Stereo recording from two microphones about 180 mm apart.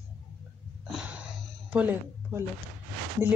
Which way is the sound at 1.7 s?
10° right (ahead or behind).